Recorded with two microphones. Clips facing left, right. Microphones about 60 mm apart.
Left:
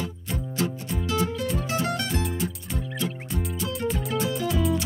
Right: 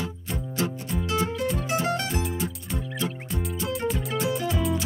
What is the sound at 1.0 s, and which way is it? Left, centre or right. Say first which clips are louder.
Music: even; right.